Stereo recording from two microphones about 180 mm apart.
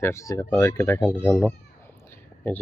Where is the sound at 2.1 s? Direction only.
10° left (ahead or behind).